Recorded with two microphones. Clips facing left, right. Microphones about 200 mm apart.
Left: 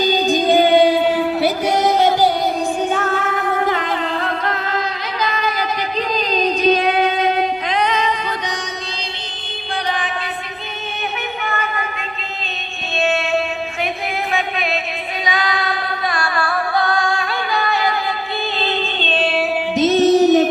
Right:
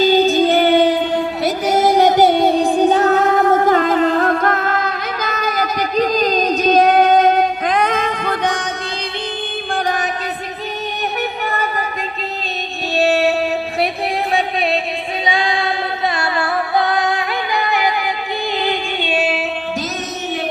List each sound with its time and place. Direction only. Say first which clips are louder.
0.0 s music: right 4 dB; 15° left (ahead or behind)
1.4 s music: right 1 dB; centre (ahead or behind); by 8.6 s 55° right (ahead or behind)
13.0 s music: right 4 dB; 35° right (ahead or behind)
15.3 s female singing: right 2 dB; 30° right (ahead or behind)
16.1 s music: right 1 dB; 25° right (ahead or behind); by 19.5 s 5° right (ahead or behind)
19.7 s music: left 12 dB; 25° left (ahead or behind)